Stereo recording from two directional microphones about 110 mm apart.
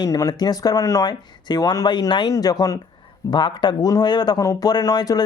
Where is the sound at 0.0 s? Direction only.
35° left (ahead or behind).